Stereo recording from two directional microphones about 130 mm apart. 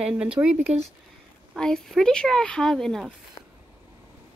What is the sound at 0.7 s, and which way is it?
Speech, 50° right (ahead or behind).